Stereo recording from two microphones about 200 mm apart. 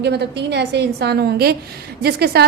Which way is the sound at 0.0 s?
55° right (ahead or behind).